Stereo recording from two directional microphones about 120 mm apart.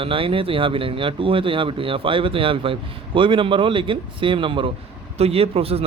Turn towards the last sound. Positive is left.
turn(degrees=-55)  # may be behind; listen again after turning